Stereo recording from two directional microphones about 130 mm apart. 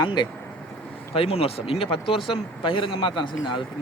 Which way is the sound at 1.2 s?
50° left (ahead or behind).